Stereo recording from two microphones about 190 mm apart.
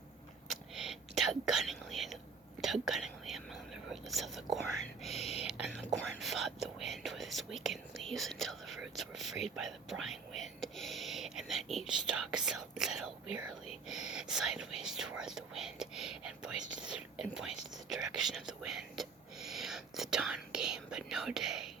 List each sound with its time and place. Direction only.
0.4 s whispering: centre (ahead or behind)
5.2 s whispering: 35° left (ahead or behind)
5.5 s whispering: 5° right (ahead or behind)
10.8 s speech: centre (ahead or behind)
14.1 s speech: 5° right (ahead or behind)